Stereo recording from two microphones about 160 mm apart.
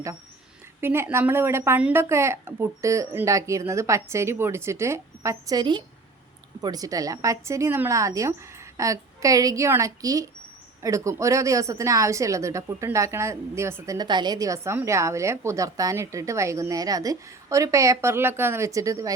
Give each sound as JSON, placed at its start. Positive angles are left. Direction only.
{"t": 0.8, "sound": "a woman's voice", "side_deg": -15}